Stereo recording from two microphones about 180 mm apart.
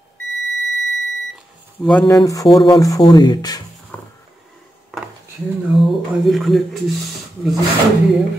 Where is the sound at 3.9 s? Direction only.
5° left (ahead or behind).